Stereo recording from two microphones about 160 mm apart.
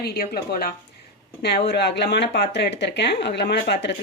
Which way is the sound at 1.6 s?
90° left.